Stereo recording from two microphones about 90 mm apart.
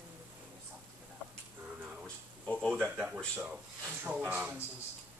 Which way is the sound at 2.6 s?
10° left (ahead or behind).